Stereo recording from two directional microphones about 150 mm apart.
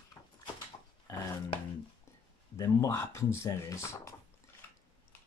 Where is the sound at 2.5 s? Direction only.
20° left (ahead or behind).